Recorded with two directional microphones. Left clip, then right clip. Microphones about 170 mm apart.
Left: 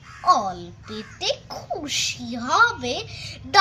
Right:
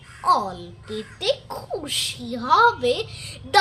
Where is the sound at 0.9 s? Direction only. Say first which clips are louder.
Right 2 dB; 15° right (ahead or behind).